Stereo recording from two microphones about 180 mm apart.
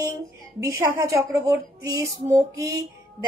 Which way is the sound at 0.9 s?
15° right (ahead or behind).